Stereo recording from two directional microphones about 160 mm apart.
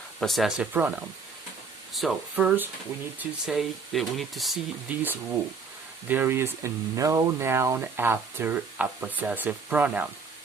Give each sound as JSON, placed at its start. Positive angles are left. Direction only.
{"t": 0.2, "sound": "speech", "side_deg": 0}
{"t": 1.9, "sound": "speech", "side_deg": 0}
{"t": 6.1, "sound": "speech", "side_deg": -15}